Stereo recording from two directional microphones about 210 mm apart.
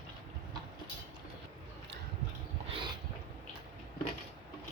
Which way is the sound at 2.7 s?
20° right (ahead or behind).